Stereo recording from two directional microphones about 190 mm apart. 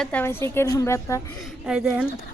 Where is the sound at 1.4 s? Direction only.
5° right (ahead or behind).